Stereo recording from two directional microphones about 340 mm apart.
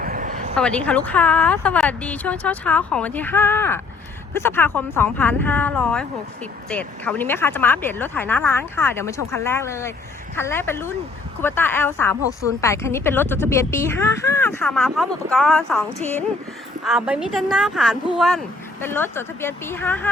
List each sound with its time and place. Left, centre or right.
0.0 s a sound: right
0.5 s speech: centre
16.8 s speech: centre